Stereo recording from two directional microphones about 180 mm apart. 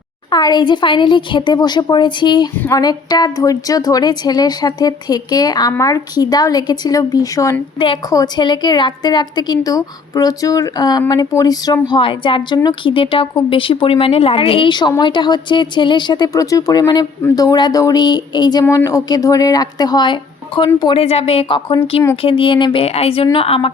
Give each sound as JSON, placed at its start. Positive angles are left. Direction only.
{"t": 0.3, "sound": "speech", "side_deg": 25}